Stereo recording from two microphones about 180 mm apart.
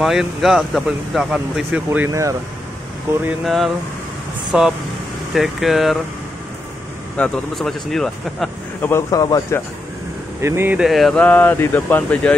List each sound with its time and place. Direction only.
0.0 s speech: centre (ahead or behind); by 2.3 s 15° right (ahead or behind)
3.4 s speech: centre (ahead or behind)
7.2 s speech: centre (ahead or behind)
8.9 s speech: 20° left (ahead or behind)
10.4 s speech: 15° right (ahead or behind); by 12.4 s 10° left (ahead or behind)